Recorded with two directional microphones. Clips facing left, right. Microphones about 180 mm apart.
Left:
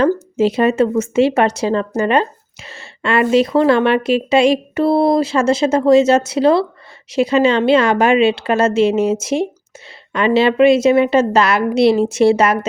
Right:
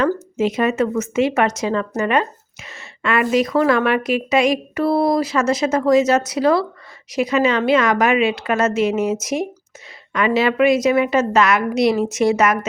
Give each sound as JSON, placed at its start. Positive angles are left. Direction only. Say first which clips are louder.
{"t": 0.0, "sound": "speech", "louder": "left 4 dB", "side_deg": 30}